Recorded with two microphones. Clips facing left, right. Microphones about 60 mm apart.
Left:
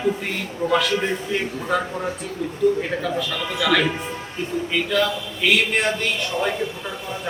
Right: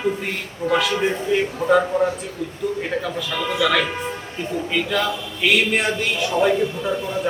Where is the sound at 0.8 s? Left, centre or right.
Centre.